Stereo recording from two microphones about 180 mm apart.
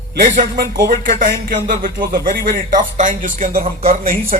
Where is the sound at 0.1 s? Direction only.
50° right (ahead or behind).